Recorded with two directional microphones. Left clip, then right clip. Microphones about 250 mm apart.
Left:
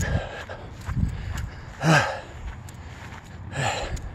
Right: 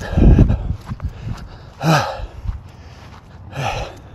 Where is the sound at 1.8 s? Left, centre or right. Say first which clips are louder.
Right 3 dB; centre.